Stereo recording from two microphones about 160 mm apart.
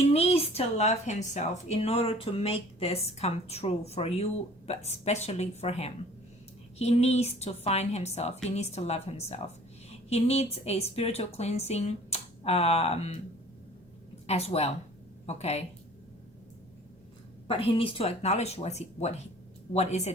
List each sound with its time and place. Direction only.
0.0 s a woman's voice: 40° left (ahead or behind)
14.3 s speech: 40° left (ahead or behind)
17.5 s speech: 35° left (ahead or behind)